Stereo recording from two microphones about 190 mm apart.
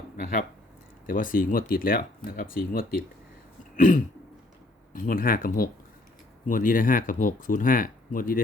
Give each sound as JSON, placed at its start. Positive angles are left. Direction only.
{"t": 0.2, "sound": "speech", "side_deg": 45}